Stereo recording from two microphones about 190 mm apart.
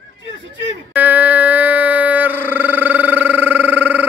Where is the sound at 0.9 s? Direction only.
10° right (ahead or behind).